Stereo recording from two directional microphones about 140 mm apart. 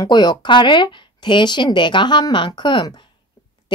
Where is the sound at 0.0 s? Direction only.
30° left (ahead or behind).